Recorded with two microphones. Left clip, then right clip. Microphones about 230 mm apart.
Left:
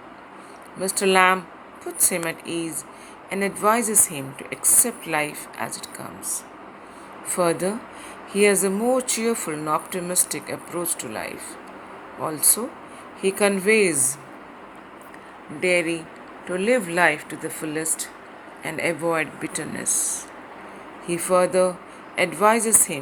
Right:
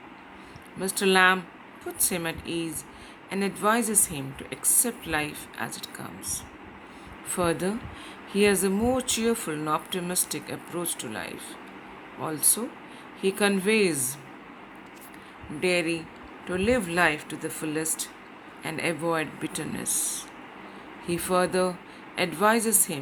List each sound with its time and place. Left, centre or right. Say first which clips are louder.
0.8 s speech: left 3 dB; centre
15.6 s speech: left 4 dB; right